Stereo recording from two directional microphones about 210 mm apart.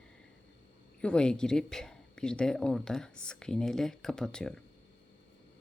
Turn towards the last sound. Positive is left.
turn(degrees=5)  # may be behind; listen again after turning